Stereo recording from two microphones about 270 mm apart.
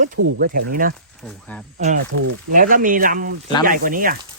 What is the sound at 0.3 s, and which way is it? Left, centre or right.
Speech, right.